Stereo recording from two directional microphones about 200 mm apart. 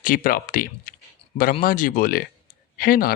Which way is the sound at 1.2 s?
25° left (ahead or behind).